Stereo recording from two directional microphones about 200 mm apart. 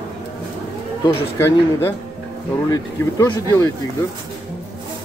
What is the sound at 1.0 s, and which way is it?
Speech, 15° left (ahead or behind).